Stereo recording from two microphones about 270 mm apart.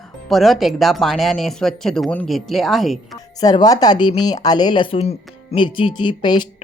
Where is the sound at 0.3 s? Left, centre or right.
Centre.